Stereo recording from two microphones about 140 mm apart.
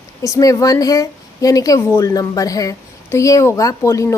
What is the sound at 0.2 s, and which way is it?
A woman's voice, 25° left (ahead or behind).